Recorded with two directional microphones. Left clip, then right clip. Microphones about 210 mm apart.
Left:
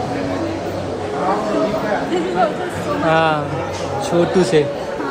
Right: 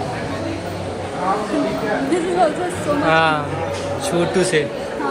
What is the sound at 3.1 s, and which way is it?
Speech, 10° left (ahead or behind).